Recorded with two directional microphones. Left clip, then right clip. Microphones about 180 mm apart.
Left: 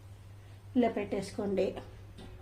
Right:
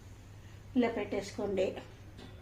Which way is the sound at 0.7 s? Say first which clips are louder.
Left 2 dB; 20° left (ahead or behind).